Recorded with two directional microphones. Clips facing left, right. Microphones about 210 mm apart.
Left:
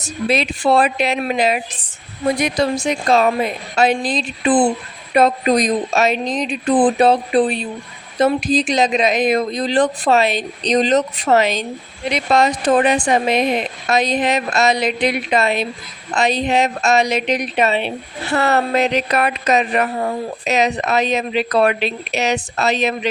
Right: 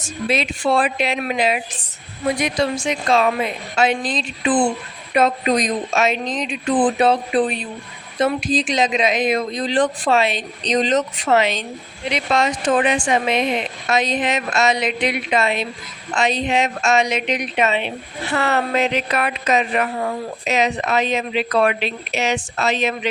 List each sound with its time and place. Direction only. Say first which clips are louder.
0.0 s speech: left 3 dB; 40° left (ahead or behind)